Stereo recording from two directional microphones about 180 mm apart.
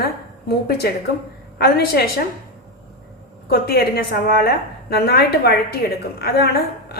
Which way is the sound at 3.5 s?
60° left (ahead or behind).